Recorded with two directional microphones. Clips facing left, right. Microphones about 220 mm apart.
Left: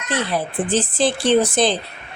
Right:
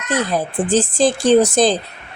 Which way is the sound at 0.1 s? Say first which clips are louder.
Right 3 dB; 45° right (ahead or behind).